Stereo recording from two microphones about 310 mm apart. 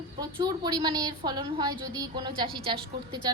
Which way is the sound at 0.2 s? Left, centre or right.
Centre.